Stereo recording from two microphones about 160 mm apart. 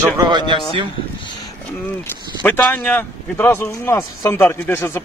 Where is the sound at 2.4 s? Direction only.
10° left (ahead or behind).